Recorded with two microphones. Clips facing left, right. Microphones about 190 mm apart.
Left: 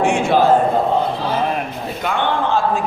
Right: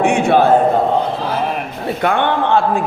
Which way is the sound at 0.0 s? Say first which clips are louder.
Right 2 dB; 60° right (ahead or behind).